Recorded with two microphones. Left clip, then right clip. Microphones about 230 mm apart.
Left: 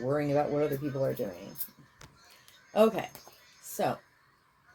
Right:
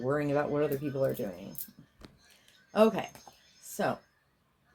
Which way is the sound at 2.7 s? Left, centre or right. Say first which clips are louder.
Even; right.